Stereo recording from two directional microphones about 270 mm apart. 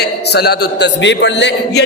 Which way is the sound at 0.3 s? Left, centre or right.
Left.